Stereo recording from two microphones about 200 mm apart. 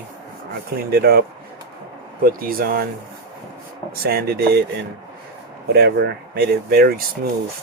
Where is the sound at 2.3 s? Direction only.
45° right (ahead or behind).